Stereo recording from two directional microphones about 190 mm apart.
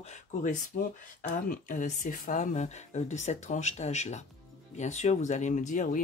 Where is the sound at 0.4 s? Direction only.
45° left (ahead or behind).